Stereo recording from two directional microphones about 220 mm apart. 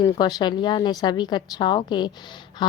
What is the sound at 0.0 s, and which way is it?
A woman's voice, 20° left (ahead or behind).